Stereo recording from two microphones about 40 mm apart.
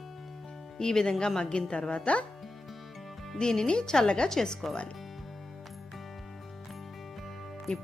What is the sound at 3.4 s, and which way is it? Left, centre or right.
Speech, centre.